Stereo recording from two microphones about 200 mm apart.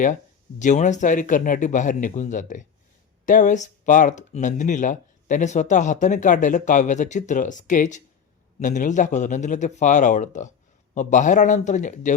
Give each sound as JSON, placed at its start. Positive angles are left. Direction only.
{"t": 0.6, "sound": "speech", "side_deg": 35}